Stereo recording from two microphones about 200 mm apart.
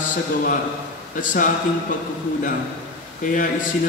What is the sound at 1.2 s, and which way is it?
Speech, 40° left (ahead or behind).